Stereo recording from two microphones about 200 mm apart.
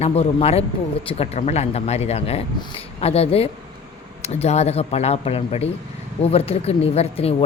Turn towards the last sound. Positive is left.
turn(degrees=30)  # may be behind; listen again after turning